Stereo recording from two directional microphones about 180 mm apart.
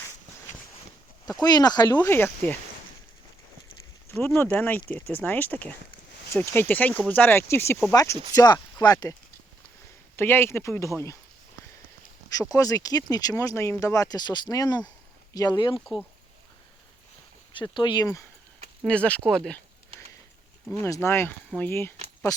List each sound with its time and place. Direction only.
1.4 s speech: 20° left (ahead or behind)
2.0 s speech: 10° left (ahead or behind)
4.4 s speech: 10° left (ahead or behind)
10.2 s speech: 10° left (ahead or behind)
12.3 s speech: 20° left (ahead or behind)
15.8 s speech: centre (ahead or behind)
17.5 s speech: 25° left (ahead or behind)
18.9 s speech: 5° left (ahead or behind)
20.8 s speech: 15° left (ahead or behind)